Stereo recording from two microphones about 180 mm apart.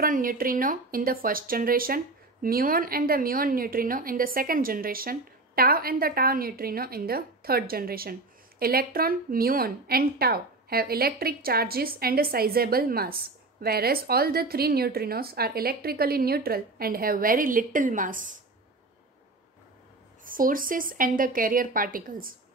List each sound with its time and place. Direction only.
0.0 s a woman's voice: 50° right (ahead or behind)
20.2 s a woman's voice: 50° right (ahead or behind)